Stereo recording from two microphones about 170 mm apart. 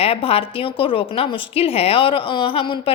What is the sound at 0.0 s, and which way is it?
A woman's voice, 35° left (ahead or behind).